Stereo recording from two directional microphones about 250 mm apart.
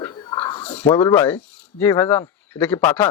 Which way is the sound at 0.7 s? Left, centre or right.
Centre.